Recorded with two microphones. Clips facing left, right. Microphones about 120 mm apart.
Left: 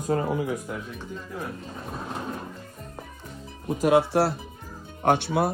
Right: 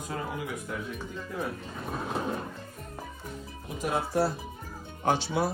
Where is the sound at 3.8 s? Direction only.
75° left (ahead or behind).